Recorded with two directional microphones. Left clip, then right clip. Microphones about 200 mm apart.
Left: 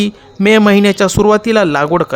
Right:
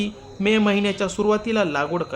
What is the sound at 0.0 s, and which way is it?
Speech, 50° left (ahead or behind).